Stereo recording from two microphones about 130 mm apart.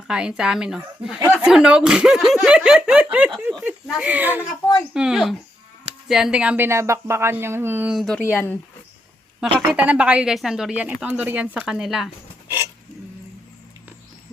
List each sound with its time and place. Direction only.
0.1 s speech: 5° right (ahead or behind)
6.7 s speech: 20° right (ahead or behind)
7.9 s speech: 5° left (ahead or behind)
8.2 s speech: 20° left (ahead or behind)
9.6 s speech: 10° right (ahead or behind)